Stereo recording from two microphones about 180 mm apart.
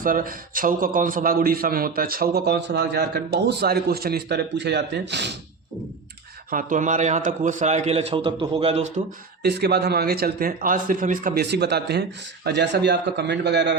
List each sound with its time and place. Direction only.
0.0 s a man's voice: 50° right (ahead or behind); by 5.4 s 70° right (ahead or behind)
6.5 s a man's voice: 45° right (ahead or behind)
9.4 s a man's voice: 65° right (ahead or behind)